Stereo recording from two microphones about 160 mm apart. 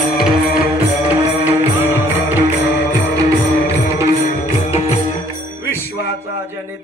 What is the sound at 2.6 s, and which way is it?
Music, 90° left.